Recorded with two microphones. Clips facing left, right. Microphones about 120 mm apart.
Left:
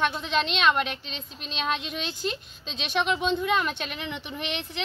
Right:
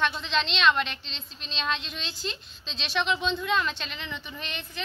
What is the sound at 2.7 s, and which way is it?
Speech, 50° left (ahead or behind).